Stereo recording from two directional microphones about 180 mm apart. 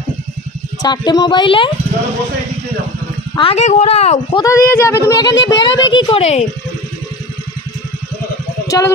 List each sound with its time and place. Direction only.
0.8 s speech: 25° left (ahead or behind)
3.3 s speech: 35° left (ahead or behind)
4.4 s speech: 15° left (ahead or behind)
5.9 s speech: 35° left (ahead or behind)
8.6 s a sound: 20° left (ahead or behind)